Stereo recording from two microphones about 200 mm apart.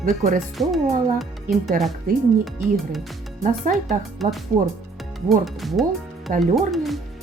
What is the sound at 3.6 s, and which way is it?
Speech, 40° right (ahead or behind).